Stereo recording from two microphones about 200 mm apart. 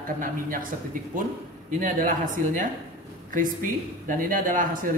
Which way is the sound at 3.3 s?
40° right (ahead or behind).